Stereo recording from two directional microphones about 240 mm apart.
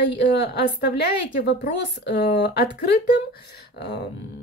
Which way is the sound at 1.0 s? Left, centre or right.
Left.